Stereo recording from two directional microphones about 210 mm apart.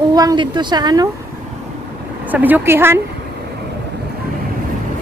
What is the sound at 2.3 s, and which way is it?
Speech, 10° right (ahead or behind).